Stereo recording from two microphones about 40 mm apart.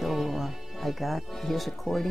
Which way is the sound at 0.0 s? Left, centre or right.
Centre.